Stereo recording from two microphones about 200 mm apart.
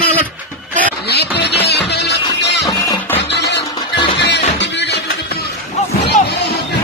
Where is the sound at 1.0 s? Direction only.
55° left (ahead or behind).